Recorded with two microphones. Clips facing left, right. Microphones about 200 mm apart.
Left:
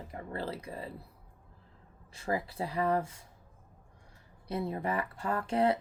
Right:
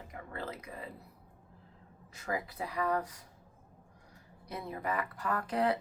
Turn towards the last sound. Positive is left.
turn(degrees=25)  # may be behind; listen again after turning